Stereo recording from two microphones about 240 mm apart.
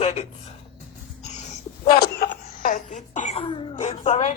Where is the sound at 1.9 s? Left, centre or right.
Left.